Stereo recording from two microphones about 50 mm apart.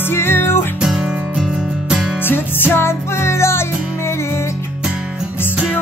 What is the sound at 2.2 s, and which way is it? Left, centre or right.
Music, left.